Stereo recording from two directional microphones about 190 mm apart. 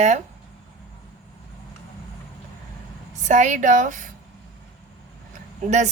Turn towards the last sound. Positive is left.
turn(degrees=-40)  # may be behind; listen again after turning